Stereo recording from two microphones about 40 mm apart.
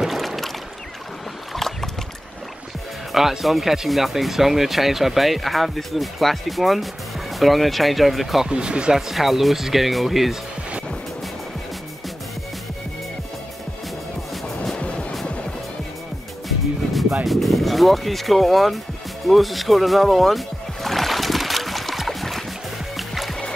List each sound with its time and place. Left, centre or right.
0.0 s boat: centre
1.5 s boat: centre
3.1 s speech: centre
8.5 s speech: right
8.9 s speech: centre
14.8 s music: left
17.3 s speech: centre
19.2 s music: centre